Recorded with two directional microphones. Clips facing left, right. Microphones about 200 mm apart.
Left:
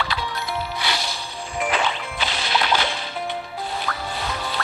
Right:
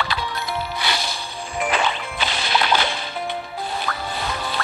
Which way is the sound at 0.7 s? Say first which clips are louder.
Right 1 dB; 55° right (ahead or behind).